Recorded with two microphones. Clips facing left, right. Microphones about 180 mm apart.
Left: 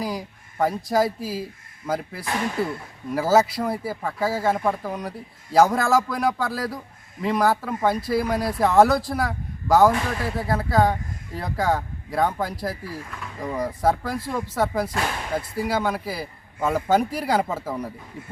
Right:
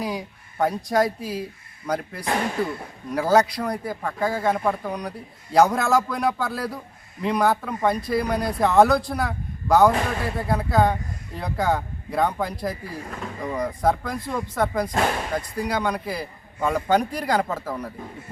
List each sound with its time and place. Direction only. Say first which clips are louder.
0.0 s speech: even; centre (ahead or behind)
13.1 s speech: right 4 dB; 40° right (ahead or behind)
13.4 s speech: even; 5° left (ahead or behind)